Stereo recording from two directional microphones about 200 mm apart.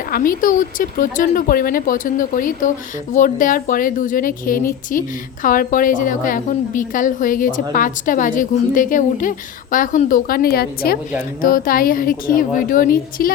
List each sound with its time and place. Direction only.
0.1 s a woman's voice: 40° left (ahead or behind)